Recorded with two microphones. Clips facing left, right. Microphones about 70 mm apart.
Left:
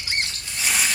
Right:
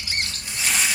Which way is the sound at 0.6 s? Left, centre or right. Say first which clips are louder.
Even; centre.